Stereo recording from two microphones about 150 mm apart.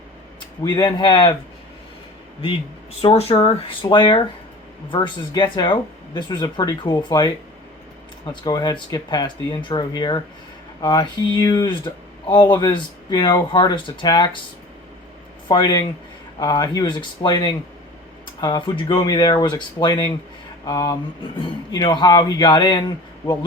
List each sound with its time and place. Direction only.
0.3 s speech: 30° left (ahead or behind)
3.0 s speech: 40° left (ahead or behind)
15.4 s speech: 30° left (ahead or behind)